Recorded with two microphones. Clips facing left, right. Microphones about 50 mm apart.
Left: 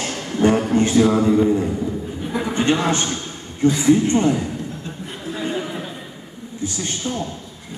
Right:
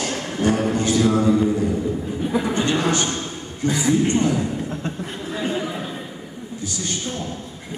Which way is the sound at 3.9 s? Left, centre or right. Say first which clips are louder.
Left 2 dB; left.